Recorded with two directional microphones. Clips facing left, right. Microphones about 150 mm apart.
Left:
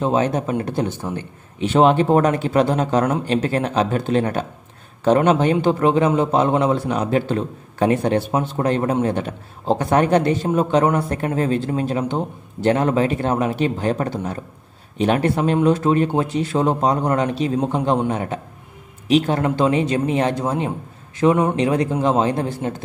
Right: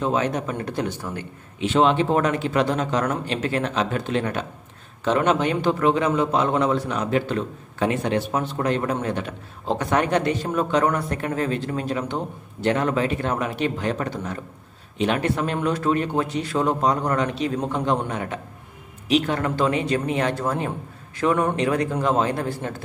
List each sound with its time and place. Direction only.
0.0 s speech: 30° left (ahead or behind)
1.7 s a man's voice: 45° left (ahead or behind)
8.3 s a man's voice: 30° left (ahead or behind)